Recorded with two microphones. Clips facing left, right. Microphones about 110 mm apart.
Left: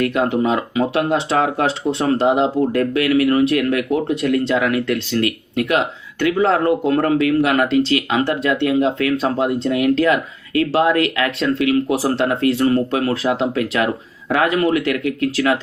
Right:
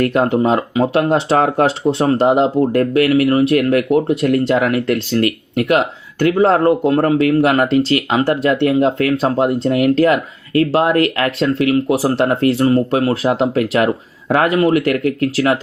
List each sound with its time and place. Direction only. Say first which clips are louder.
0.0 s speech: right 3 dB; 35° right (ahead or behind)